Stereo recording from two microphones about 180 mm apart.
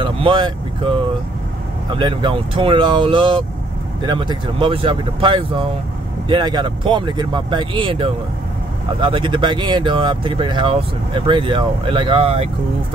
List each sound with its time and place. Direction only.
0.0 s vehicle: 25° right (ahead or behind)
2.0 s speech: 25° right (ahead or behind)